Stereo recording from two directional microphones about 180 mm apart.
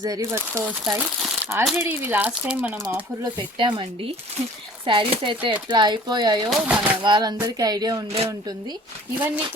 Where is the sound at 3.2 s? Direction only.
25° right (ahead or behind).